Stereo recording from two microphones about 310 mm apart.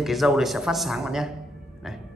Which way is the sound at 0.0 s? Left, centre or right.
Centre.